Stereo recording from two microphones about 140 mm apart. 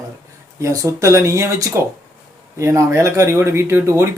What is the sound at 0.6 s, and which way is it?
Speech, 20° right (ahead or behind).